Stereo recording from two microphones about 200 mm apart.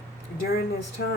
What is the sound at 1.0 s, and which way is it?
Speech, 55° left (ahead or behind).